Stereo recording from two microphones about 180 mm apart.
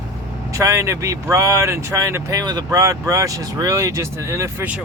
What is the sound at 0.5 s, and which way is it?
Speech, 15° right (ahead or behind).